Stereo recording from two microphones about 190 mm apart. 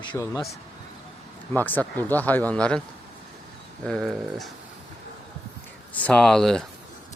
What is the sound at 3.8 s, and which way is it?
Speech, 5° left (ahead or behind).